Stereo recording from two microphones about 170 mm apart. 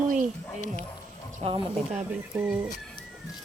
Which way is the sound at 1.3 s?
40° right (ahead or behind).